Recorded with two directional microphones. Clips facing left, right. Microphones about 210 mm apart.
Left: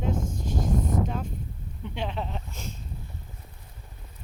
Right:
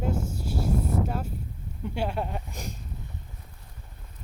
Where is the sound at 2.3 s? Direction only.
15° right (ahead or behind).